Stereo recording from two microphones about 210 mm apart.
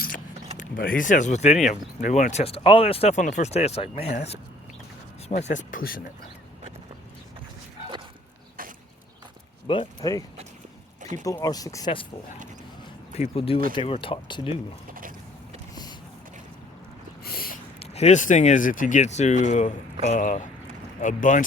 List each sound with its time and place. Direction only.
0.5 s speech: 40° left (ahead or behind)
5.5 s speech: 40° left (ahead or behind)
9.6 s speech: 20° left (ahead or behind)
13.1 s speech: 30° left (ahead or behind)
15.7 s vehicle: 20° left (ahead or behind)
17.2 s a sound: 45° left (ahead or behind)
17.7 s speech: 30° left (ahead or behind)